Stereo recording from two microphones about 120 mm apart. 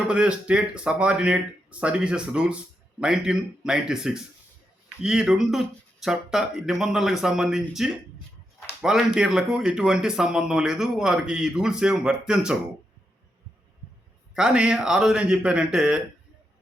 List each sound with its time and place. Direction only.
0.1 s speech: 10° right (ahead or behind)
14.3 s speech: 10° right (ahead or behind)